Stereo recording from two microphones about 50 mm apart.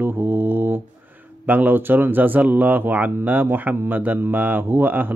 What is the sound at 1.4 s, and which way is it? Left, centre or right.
Speech, right.